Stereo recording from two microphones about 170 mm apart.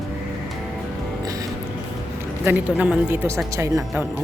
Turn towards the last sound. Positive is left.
turn(degrees=-20)  # may be behind; listen again after turning